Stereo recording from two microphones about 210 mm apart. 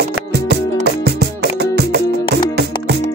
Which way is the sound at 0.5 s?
50° right (ahead or behind).